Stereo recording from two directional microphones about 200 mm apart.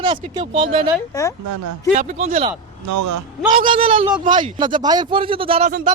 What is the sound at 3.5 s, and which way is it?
Speech, 25° right (ahead or behind).